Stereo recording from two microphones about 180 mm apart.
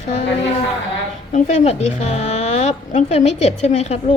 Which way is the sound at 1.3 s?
40° left (ahead or behind).